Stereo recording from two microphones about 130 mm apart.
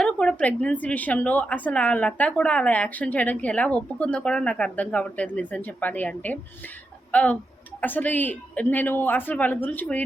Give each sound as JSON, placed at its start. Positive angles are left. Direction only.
{"t": 0.0, "sound": "a woman's voice", "side_deg": 10}